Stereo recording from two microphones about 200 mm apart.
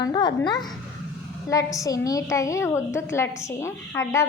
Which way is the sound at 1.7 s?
15° left (ahead or behind).